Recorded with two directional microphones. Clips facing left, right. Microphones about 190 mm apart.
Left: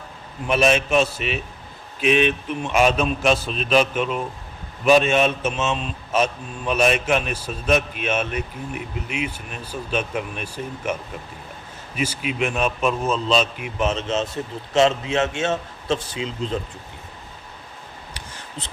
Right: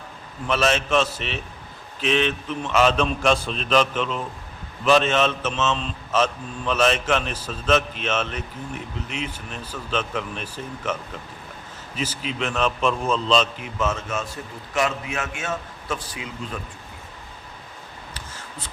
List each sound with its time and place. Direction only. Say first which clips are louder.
0.4 s a man's voice: left 3 dB; 15° left (ahead or behind)